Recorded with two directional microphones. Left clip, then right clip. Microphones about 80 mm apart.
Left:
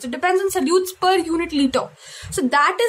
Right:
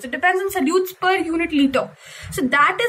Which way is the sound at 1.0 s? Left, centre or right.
Left.